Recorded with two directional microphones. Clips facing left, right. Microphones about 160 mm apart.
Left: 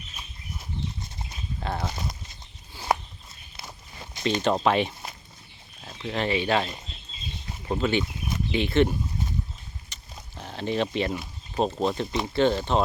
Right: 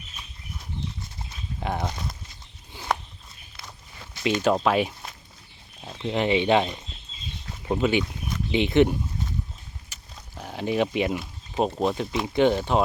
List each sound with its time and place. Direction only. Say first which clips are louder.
1.6 s speech: right 2 dB; 15° right (ahead or behind)
1.9 s speech: even; 5° left (ahead or behind)
3.6 s walk: left 2 dB; 20° left (ahead or behind)
4.4 s speech: right 1 dB; 5° right (ahead or behind)
5.8 s speech: right 3 dB; 15° right (ahead or behind)